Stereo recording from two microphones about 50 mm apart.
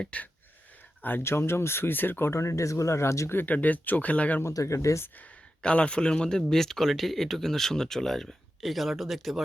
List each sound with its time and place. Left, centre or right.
0.1 s speech: left
0.7 s a sound: left
1.2 s speech: left
2.3 s speech: left
3.3 s speech: left
4.4 s speech: left
5.0 s speech: left; by 9.4 s centre